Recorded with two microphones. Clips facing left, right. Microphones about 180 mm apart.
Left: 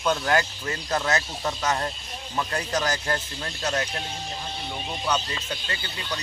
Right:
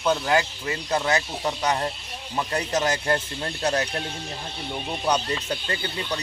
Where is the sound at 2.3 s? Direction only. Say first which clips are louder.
Right 2 dB; 25° right (ahead or behind).